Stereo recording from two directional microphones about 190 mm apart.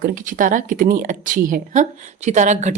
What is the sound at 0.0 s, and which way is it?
A woman's voice, 45° right (ahead or behind).